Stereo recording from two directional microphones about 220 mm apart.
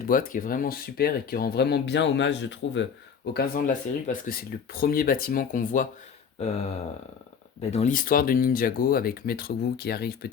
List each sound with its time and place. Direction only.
0.1 s speech: 40° left (ahead or behind); by 2.8 s 55° left (ahead or behind)
3.3 s speech: 40° left (ahead or behind)
6.4 s a sound: 30° left (ahead or behind)
7.6 s speech: 30° left (ahead or behind); by 10.2 s 45° left (ahead or behind)